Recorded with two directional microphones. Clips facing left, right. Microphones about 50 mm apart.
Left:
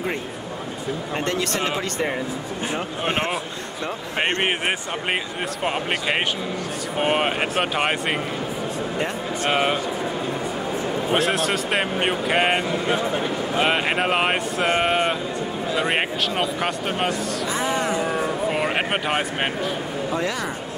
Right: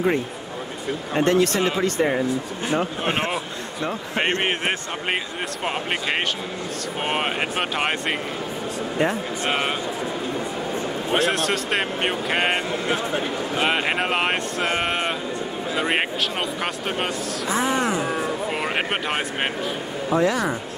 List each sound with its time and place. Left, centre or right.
2.6 s speech: centre
9.5 s speech: centre
11.1 s speech: centre
17.6 s speech: centre
18.0 s a sound: centre
20.2 s speech: right